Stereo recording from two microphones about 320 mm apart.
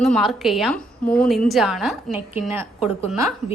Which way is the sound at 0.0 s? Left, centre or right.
Centre.